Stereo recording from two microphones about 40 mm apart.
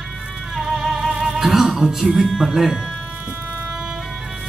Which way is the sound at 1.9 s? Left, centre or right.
Centre.